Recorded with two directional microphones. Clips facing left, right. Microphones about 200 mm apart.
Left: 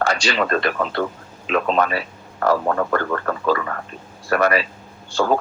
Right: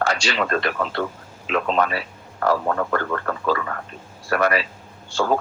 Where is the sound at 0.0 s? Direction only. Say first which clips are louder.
Left 2 dB; 45° left (ahead or behind).